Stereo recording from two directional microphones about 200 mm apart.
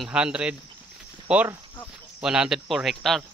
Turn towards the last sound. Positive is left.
turn(degrees=0)  # may be behind; listen again after turning